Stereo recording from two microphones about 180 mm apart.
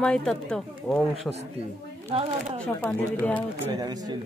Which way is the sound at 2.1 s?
30° right (ahead or behind).